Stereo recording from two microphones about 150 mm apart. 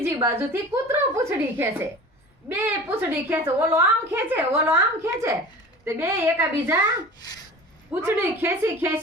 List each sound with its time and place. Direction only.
0.0 s a woman's voice: 15° right (ahead or behind)
8.0 s a woman's voice: 15° right (ahead or behind)